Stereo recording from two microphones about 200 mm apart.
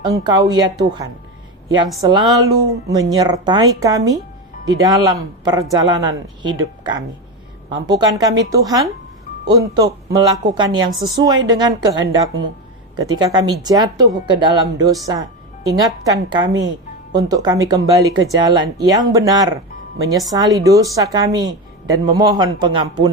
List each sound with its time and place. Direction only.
0.0 s speech: 20° right (ahead or behind)
7.7 s a woman's voice: 20° right (ahead or behind)